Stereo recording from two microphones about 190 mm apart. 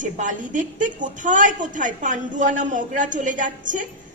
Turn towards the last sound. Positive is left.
turn(degrees=-40)  # may be behind; listen again after turning